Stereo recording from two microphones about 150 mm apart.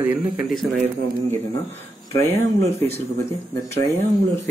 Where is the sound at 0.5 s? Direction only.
Centre (ahead or behind).